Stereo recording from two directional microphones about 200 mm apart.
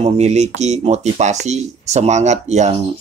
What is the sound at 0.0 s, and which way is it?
Speech, 35° right (ahead or behind).